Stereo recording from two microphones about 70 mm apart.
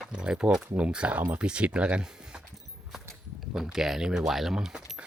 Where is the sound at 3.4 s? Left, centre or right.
Centre.